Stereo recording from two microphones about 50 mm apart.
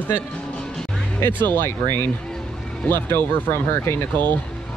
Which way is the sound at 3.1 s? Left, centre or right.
Left.